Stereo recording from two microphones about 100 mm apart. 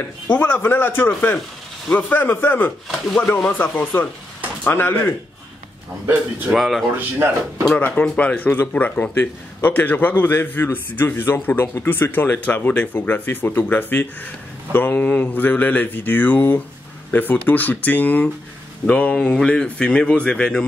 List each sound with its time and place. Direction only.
0.4 s speech: 20° left (ahead or behind)
1.9 s mantra: 15° left (ahead or behind)
4.6 s speech: 20° left (ahead or behind)
6.5 s speech: centre (ahead or behind)
7.0 s speech: 20° right (ahead or behind)
7.6 s speech: 10° left (ahead or behind)
14.7 s mantra: 20° left (ahead or behind)